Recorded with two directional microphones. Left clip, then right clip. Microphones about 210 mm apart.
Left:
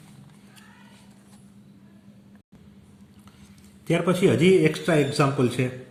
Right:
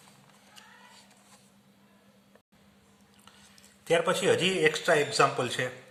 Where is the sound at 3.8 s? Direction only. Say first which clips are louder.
Left 2 dB; 15° right (ahead or behind).